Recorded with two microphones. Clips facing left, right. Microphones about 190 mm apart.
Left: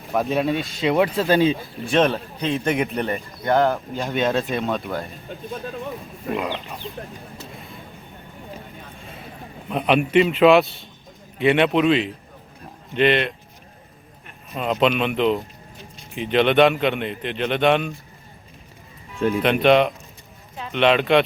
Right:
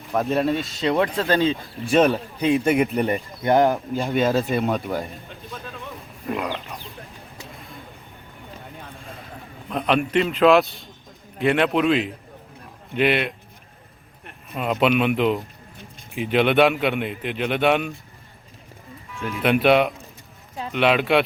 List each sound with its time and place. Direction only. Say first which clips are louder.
0.1 s a man's voice: even; centre (ahead or behind)
0.9 s speech: left 3 dB; 15° left (ahead or behind)
1.9 s a man's voice: right 1 dB; 5° right (ahead or behind)
3.0 s a man's voice: right 3 dB; 15° right (ahead or behind)
5.6 s a sound: left 8 dB; 55° left (ahead or behind)
6.3 s a man's voice: left 1 dB; centre (ahead or behind)
9.6 s a man's voice: left 2 dB; 5° left (ahead or behind)
14.5 s a man's voice: even; 5° right (ahead or behind)
19.4 s a man's voice: even; 5° right (ahead or behind)